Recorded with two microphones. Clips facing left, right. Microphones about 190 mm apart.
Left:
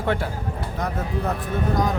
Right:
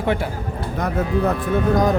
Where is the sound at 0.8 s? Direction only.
90° right.